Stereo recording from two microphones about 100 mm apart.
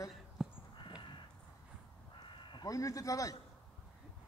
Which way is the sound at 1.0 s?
55° left (ahead or behind).